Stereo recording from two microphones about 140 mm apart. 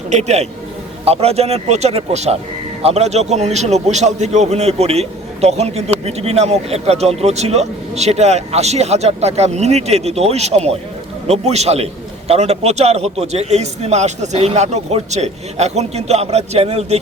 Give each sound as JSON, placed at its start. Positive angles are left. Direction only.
{"t": 0.1, "sound": "a man's voice", "side_deg": -50}